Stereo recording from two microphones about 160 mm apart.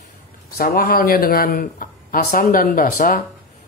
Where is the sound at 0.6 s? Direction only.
65° left (ahead or behind).